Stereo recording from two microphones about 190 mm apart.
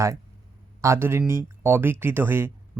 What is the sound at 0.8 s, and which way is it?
Speech, 15° right (ahead or behind).